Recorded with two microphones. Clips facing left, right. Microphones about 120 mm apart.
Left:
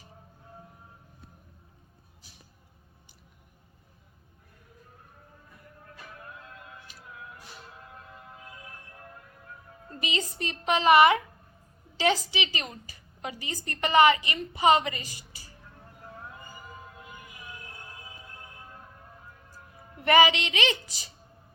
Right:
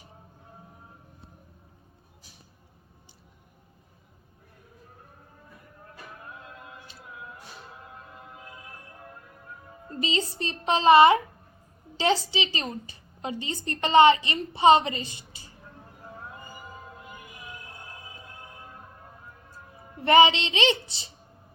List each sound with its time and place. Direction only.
6.9 s a sound: 25° right (ahead or behind)
9.9 s a woman's voice: 30° right (ahead or behind)
20.0 s a woman's voice: 25° right (ahead or behind)